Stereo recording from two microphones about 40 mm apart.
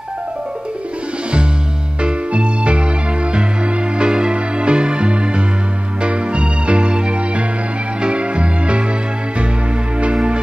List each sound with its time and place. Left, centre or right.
2.0 s music: right
4.0 s music: right